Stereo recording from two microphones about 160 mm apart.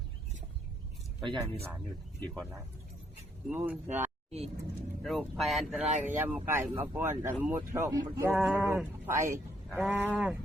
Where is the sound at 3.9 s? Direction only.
45° right (ahead or behind).